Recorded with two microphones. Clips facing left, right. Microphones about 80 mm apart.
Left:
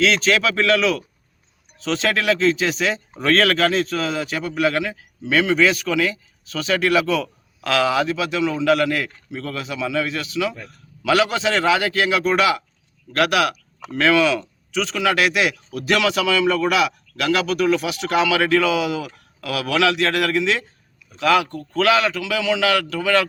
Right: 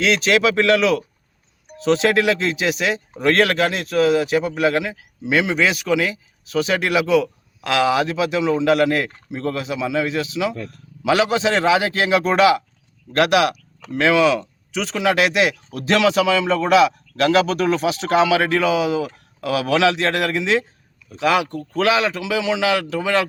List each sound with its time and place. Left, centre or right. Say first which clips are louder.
0.0 s speech: right 1 dB; centre